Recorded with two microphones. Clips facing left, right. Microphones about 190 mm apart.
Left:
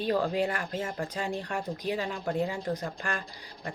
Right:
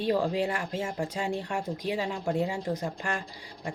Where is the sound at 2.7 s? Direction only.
10° right (ahead or behind).